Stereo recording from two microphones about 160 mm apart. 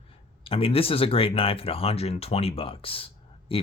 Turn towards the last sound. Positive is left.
turn(degrees=35)  # may be behind; listen again after turning